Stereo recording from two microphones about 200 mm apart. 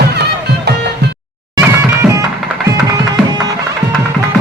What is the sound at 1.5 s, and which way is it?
Music, 15° right (ahead or behind).